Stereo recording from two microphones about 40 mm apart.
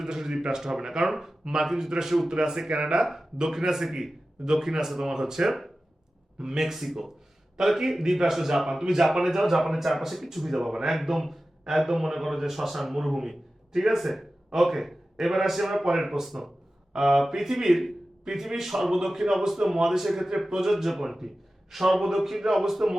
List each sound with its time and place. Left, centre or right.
0.0 s a man's voice: centre